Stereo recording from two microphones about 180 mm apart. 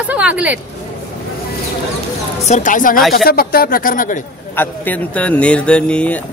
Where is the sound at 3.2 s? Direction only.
55° left (ahead or behind).